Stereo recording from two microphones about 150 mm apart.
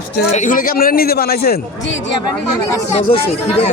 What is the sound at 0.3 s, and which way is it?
Speech, 60° left (ahead or behind).